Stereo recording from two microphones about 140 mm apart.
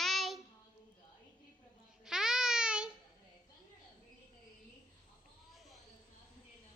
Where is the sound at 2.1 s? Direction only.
5° right (ahead or behind).